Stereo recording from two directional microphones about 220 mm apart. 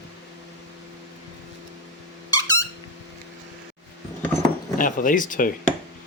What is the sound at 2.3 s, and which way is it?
Squeak, 15° left (ahead or behind).